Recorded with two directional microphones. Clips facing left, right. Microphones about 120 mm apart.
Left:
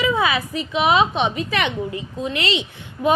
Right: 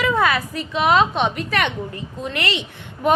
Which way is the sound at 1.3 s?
50° right (ahead or behind).